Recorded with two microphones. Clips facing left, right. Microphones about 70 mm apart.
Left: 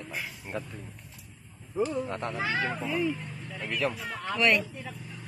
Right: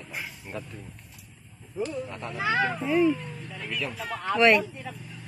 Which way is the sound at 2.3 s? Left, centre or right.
Right.